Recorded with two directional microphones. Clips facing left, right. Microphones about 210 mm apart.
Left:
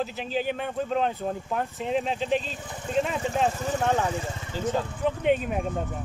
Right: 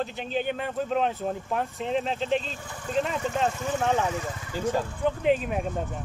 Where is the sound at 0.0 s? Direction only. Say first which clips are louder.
Even; 5° left (ahead or behind).